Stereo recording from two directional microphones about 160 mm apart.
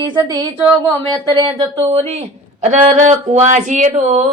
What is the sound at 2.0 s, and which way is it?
Speech, 40° right (ahead or behind).